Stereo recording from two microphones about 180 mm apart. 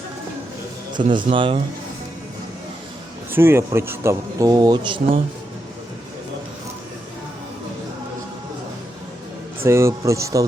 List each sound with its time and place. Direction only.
1.1 s speech: 30° right (ahead or behind)
3.3 s speech: 15° right (ahead or behind)
9.6 s speech: 15° right (ahead or behind)